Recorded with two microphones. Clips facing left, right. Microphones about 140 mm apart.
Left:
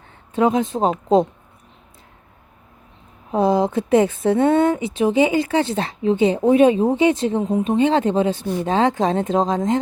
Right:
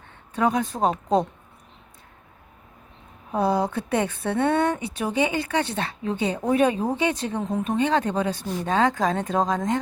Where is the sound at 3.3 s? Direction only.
25° left (ahead or behind).